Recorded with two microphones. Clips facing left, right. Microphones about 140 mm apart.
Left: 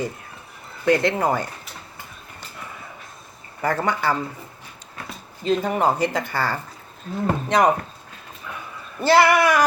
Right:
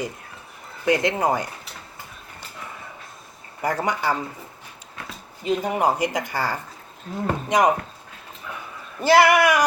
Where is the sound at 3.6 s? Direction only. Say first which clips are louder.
Left 1 dB; 15° right (ahead or behind).